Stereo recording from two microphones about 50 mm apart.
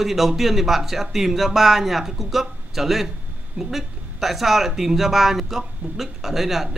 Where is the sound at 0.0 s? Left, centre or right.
Centre.